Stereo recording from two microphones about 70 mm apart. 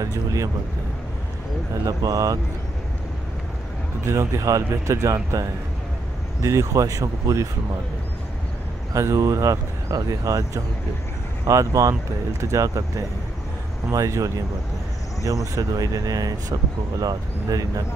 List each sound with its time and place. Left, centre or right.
0.0 s speech: right
1.9 s speech: right
4.1 s speech: right
8.9 s speech: right
15.5 s speech: right